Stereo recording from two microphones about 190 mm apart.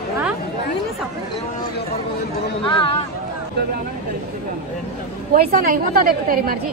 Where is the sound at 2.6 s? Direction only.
25° left (ahead or behind).